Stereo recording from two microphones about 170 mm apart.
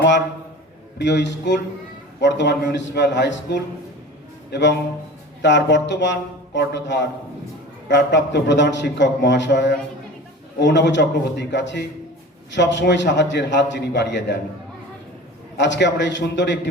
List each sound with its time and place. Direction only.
0.9 s a man's voice: 90° left
15.5 s a man's voice: 90° left